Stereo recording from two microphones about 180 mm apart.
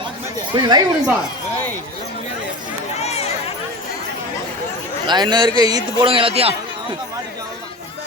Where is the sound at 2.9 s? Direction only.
35° left (ahead or behind).